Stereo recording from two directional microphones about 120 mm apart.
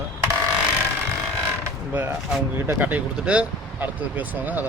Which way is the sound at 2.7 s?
15° right (ahead or behind).